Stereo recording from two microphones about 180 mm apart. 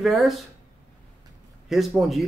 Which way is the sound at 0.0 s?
Centre (ahead or behind).